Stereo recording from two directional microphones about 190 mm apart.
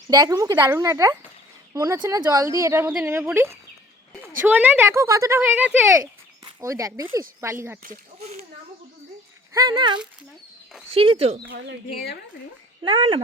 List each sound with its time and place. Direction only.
0.1 s a woman's voice: 20° right (ahead or behind)
7.8 s speech: 40° right (ahead or behind)
9.5 s speech: 20° right (ahead or behind)
11.5 s speech: 60° right (ahead or behind)
12.8 s speech: 30° right (ahead or behind)